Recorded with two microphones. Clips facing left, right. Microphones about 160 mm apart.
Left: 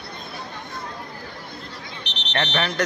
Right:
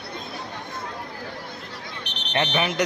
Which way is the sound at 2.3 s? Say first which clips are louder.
Right 1 dB; 10° right (ahead or behind).